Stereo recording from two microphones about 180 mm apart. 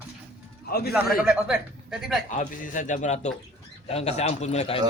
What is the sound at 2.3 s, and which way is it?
A man's voice, 45° left (ahead or behind).